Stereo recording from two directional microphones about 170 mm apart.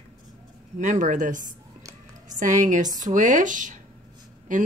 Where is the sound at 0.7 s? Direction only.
45° right (ahead or behind).